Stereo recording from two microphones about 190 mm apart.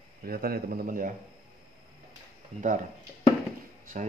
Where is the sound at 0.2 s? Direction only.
50° right (ahead or behind).